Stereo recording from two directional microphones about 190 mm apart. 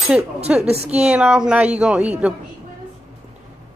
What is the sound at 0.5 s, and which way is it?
Speech, 5° right (ahead or behind).